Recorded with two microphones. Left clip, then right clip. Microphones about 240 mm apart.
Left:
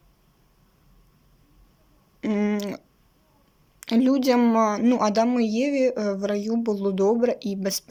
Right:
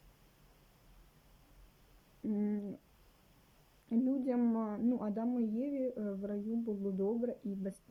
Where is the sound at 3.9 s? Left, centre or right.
Centre.